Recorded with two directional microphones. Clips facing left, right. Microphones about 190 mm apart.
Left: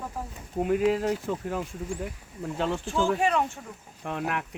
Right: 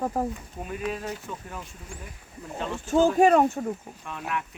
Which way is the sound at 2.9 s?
40° right (ahead or behind).